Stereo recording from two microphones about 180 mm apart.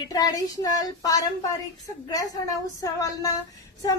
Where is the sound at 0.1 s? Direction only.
20° left (ahead or behind).